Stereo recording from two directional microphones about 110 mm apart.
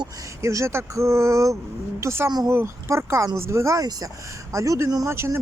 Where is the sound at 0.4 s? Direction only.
25° right (ahead or behind).